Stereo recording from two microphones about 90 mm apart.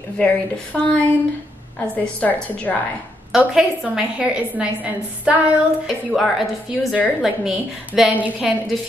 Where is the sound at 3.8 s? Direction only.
10° right (ahead or behind).